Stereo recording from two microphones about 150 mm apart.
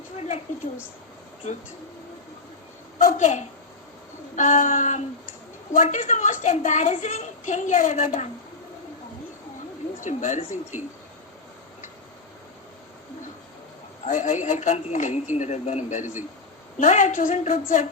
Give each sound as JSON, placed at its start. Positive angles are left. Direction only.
{"t": 3.0, "sound": "a woman's voice", "side_deg": 55}
{"t": 10.0, "sound": "a woman's voice", "side_deg": 55}
{"t": 14.1, "sound": "a woman's voice", "side_deg": 55}